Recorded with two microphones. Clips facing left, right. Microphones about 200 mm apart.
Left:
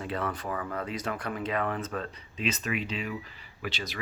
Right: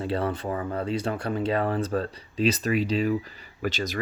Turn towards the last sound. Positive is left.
turn(degrees=-45)  # may be behind; listen again after turning